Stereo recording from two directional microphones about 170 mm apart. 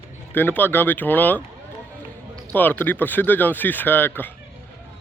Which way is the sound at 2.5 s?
10° left (ahead or behind).